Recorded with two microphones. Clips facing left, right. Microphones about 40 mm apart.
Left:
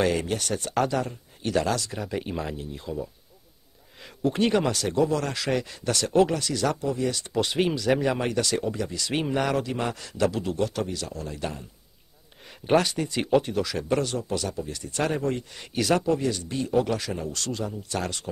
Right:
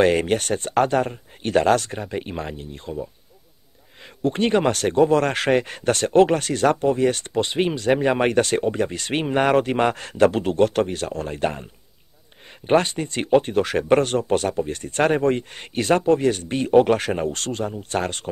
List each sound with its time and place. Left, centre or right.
0.0 s speech: right
2.0 s speech: right
4.2 s speech: right
7.3 s speech: right
12.6 s speech: right